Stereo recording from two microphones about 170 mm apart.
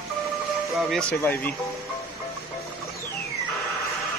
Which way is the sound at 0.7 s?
Centre (ahead or behind).